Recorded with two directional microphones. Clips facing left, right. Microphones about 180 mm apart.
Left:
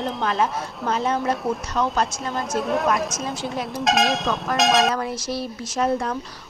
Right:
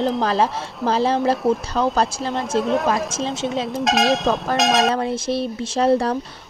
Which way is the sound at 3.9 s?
Centre (ahead or behind).